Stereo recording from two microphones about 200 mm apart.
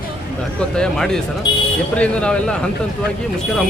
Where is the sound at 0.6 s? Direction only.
5° left (ahead or behind).